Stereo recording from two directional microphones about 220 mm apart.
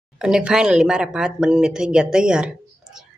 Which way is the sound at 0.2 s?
5° right (ahead or behind).